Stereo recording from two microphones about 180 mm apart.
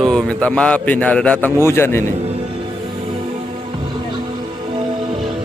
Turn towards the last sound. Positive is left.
turn(degrees=-30)  # may be behind; listen again after turning